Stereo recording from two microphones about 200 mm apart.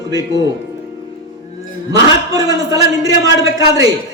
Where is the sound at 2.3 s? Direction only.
15° right (ahead or behind).